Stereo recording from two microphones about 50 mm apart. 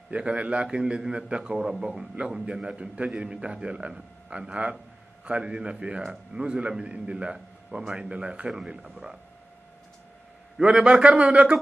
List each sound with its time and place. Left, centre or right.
0.1 s a man's voice: right
10.6 s a man's voice: centre